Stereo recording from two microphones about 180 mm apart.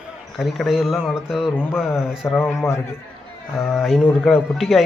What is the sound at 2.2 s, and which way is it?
Speech, 5° left (ahead or behind).